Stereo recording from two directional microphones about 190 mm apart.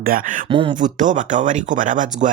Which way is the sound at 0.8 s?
40° right (ahead or behind).